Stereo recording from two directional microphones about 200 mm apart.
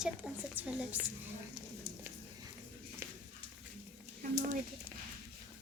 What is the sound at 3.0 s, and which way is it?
Horse, 10° right (ahead or behind).